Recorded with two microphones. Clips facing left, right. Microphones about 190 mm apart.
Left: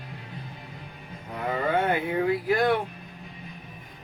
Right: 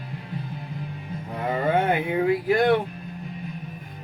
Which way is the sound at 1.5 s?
25° right (ahead or behind).